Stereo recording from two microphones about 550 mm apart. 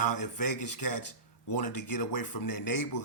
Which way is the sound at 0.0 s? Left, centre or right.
Left.